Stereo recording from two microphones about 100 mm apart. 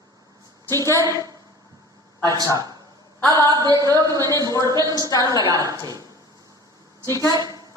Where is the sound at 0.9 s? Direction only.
35° right (ahead or behind).